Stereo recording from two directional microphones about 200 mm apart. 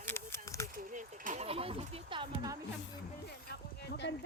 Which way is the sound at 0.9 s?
40° right (ahead or behind).